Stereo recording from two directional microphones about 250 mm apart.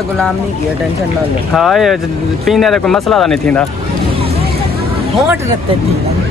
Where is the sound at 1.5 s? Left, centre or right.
Centre.